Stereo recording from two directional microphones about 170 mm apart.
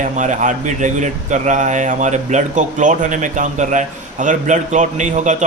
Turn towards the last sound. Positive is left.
turn(degrees=-45)  # may be behind; listen again after turning